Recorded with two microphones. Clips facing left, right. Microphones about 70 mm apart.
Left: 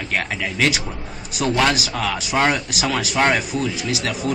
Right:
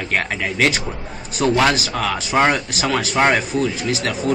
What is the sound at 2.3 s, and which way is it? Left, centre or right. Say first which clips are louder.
Speech: right 3 dB; centre.